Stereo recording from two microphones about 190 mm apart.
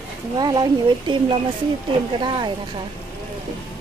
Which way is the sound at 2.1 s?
25° right (ahead or behind).